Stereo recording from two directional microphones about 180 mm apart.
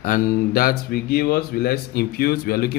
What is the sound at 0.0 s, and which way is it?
Speech, 50° left (ahead or behind).